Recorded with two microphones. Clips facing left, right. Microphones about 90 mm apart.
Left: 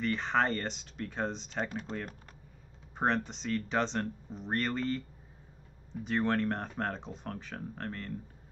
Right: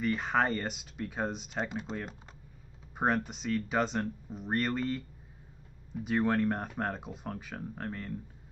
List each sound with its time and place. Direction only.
0.0 s speech: 5° right (ahead or behind)
3.0 s speech: 5° right (ahead or behind)
6.0 s speech: 5° right (ahead or behind)